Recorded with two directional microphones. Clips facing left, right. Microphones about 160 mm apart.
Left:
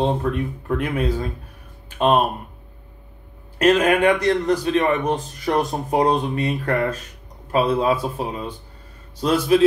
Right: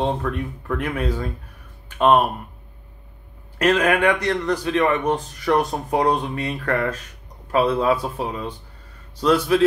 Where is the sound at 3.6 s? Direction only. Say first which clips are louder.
Left 2 dB; 30° left (ahead or behind).